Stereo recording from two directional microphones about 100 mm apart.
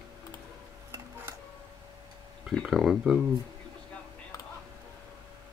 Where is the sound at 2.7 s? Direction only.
5° right (ahead or behind).